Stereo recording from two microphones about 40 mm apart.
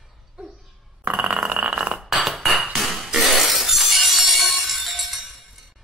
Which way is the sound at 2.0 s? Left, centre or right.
Centre.